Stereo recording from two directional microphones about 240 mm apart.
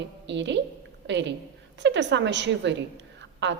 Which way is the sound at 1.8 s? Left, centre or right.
Right.